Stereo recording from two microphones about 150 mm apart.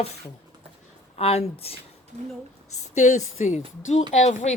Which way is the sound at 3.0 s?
50° left (ahead or behind).